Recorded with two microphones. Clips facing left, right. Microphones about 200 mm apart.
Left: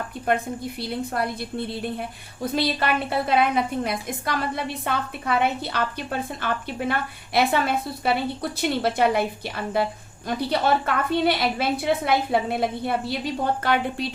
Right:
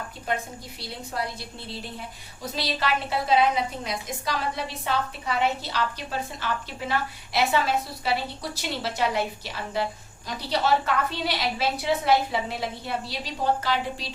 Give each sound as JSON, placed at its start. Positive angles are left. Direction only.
{"t": 0.8, "sound": "a woman's voice", "side_deg": 55}